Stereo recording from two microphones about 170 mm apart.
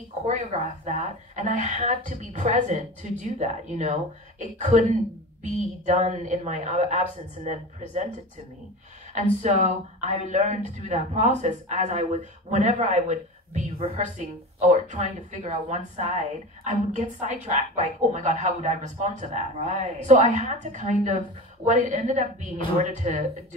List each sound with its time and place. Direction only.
0.3 s speech: 45° right (ahead or behind)
9.4 s speech: 45° right (ahead or behind)